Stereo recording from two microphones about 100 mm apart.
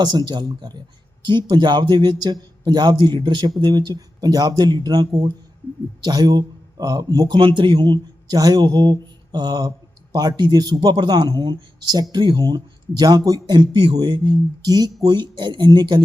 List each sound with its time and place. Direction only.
0.0 s speech: 45° right (ahead or behind)
7.3 s speech: 55° right (ahead or behind)